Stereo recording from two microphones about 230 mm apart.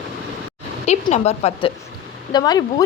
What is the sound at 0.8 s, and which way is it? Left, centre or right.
Speech, left.